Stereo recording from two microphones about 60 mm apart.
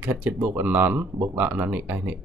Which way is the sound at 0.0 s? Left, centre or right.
Right.